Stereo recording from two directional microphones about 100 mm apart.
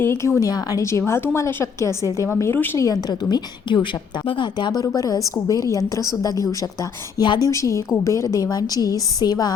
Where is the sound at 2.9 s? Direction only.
40° left (ahead or behind).